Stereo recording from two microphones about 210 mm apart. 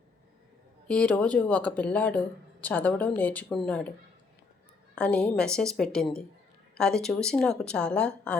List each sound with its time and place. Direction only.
0.9 s a woman's voice: 5° left (ahead or behind)
4.9 s a woman's voice: 5° left (ahead or behind)